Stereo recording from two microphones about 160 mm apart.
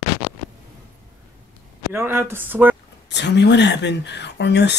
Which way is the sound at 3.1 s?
90° left.